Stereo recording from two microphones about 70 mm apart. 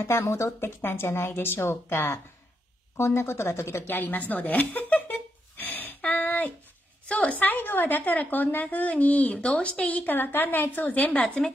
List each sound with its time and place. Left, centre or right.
0.0 s a woman's voice: left; by 11.5 s centre